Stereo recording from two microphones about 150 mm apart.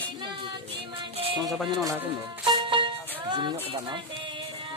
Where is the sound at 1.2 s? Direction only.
30° right (ahead or behind).